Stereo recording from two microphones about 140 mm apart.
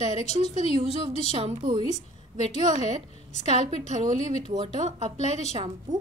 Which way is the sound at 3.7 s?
55° right (ahead or behind).